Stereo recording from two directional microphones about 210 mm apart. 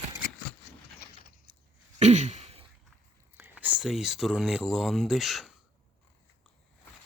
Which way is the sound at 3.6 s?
5° right (ahead or behind).